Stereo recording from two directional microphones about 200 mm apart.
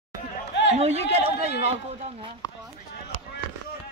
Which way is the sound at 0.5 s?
60° left (ahead or behind).